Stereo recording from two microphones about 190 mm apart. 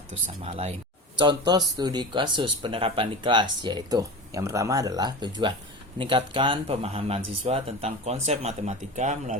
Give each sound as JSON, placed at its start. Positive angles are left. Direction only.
{"t": 0.1, "sound": "speech", "side_deg": -35}
{"t": 1.2, "sound": "speech", "side_deg": -25}